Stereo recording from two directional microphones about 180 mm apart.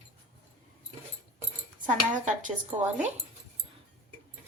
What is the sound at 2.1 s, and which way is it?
Speech, 45° right (ahead or behind).